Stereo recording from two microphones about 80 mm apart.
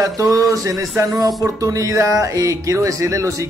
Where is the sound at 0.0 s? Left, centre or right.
Right.